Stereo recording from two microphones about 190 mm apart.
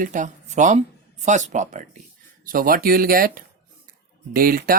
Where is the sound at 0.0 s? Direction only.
40° right (ahead or behind).